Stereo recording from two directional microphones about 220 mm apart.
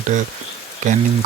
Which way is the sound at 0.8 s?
35° right (ahead or behind).